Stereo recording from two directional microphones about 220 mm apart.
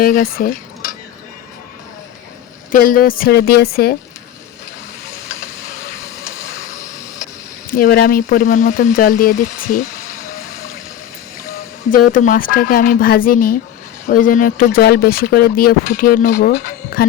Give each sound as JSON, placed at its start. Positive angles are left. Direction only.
{"t": 0.0, "sound": "speech", "side_deg": 40}
{"t": 2.7, "sound": "speech", "side_deg": 40}
{"t": 7.7, "sound": "speech", "side_deg": 45}
{"t": 11.9, "sound": "speech", "side_deg": 40}